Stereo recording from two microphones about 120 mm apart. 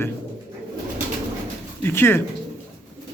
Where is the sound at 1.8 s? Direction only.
20° left (ahead or behind).